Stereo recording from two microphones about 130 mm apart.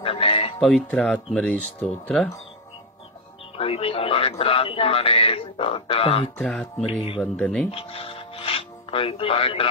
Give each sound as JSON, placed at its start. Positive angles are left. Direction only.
{"t": 0.0, "sound": "music", "side_deg": 45}
{"t": 0.6, "sound": "speech", "side_deg": 5}
{"t": 3.5, "sound": "speech", "side_deg": 45}
{"t": 6.4, "sound": "speech", "side_deg": 10}
{"t": 6.9, "sound": "speech", "side_deg": 45}
{"t": 7.2, "sound": "speech", "side_deg": 10}
{"t": 7.7, "sound": "music", "side_deg": 45}